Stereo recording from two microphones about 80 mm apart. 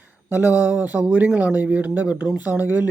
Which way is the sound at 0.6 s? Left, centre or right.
Centre.